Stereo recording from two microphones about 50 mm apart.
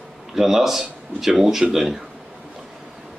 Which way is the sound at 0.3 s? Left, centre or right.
Centre.